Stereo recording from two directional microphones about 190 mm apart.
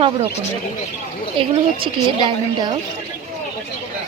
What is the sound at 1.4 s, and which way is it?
Speech, 25° right (ahead or behind).